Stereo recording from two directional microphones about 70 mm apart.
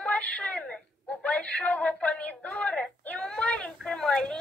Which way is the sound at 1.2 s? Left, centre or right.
Centre.